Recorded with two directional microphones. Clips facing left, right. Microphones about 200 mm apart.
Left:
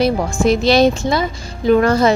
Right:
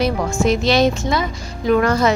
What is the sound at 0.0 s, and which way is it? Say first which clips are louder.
A woman's voice: left 3 dB; 35° left (ahead or behind).